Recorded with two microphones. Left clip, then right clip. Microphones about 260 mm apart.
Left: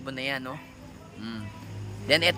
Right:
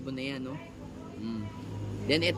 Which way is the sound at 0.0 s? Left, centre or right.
Centre.